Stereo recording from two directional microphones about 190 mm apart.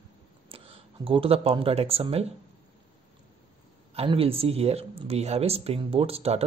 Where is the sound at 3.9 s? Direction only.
30° right (ahead or behind).